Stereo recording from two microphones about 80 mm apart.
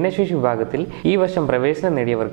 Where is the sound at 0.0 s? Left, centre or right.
Right.